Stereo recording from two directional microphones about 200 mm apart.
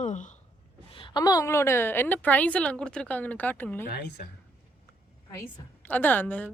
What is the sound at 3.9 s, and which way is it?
Speech, 55° left (ahead or behind).